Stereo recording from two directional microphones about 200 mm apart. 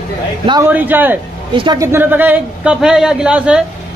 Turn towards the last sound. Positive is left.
turn(degrees=-5)  # may be behind; listen again after turning